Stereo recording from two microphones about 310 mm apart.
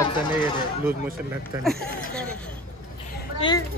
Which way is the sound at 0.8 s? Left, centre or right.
Centre.